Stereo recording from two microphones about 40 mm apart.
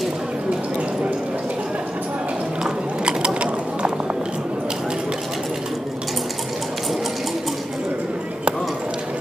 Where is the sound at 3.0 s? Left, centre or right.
Right.